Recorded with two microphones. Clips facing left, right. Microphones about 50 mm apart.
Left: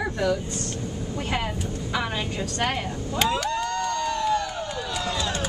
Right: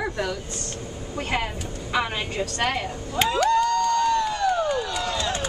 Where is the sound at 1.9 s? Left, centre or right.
Right.